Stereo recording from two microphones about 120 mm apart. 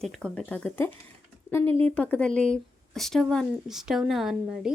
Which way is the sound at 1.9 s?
10° left (ahead or behind).